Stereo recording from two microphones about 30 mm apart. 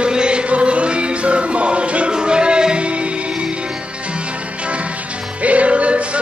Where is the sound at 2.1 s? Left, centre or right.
Right.